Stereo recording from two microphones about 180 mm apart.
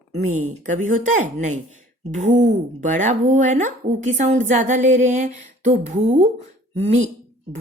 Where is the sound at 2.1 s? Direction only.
40° right (ahead or behind).